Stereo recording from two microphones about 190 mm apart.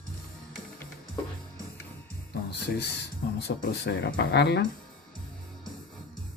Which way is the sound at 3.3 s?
60° left (ahead or behind).